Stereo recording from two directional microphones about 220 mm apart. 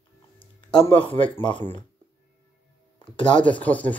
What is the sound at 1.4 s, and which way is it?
Speech, 20° left (ahead or behind).